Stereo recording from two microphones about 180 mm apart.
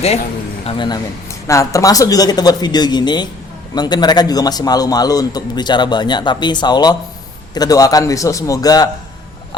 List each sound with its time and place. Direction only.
0.6 s speech: 30° left (ahead or behind)
1.5 s a man's voice: 15° left (ahead or behind)